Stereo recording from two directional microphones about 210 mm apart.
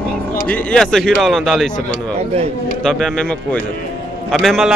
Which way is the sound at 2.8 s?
5° left (ahead or behind).